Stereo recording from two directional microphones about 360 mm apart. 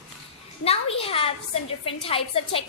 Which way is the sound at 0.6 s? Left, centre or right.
Centre.